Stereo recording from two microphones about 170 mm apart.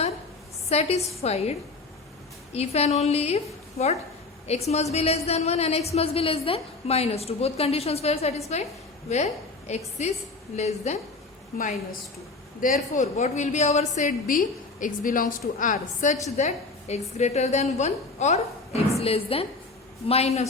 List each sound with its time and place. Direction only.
0.7 s a woman's voice: 35° left (ahead or behind)
11.5 s a woman's voice: 50° left (ahead or behind)